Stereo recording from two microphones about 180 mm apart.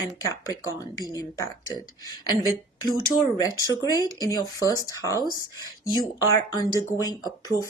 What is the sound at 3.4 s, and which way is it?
Speech, 20° left (ahead or behind).